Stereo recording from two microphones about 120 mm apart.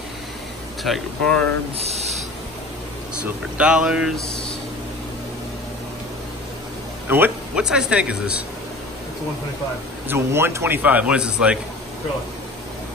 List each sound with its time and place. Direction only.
0.8 s speech: 5° left (ahead or behind)
1.8 s a sound: 60° right (ahead or behind)
3.2 s a man's voice: 10° right (ahead or behind)
7.1 s a man's voice: 15° right (ahead or behind)
10.0 s a man's voice: 20° right (ahead or behind)